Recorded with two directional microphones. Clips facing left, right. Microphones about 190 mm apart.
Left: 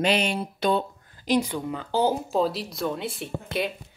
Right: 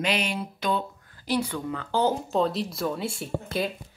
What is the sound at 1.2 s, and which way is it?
Speech, 20° left (ahead or behind).